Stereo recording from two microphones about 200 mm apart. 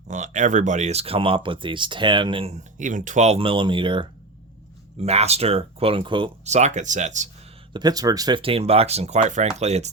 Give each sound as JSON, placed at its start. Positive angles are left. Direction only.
{"t": 0.1, "sound": "speech", "side_deg": -35}
{"t": 7.7, "sound": "speech", "side_deg": -20}